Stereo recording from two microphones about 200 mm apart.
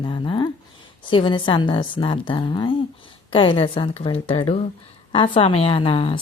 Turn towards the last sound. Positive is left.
turn(degrees=25)  # may be behind; listen again after turning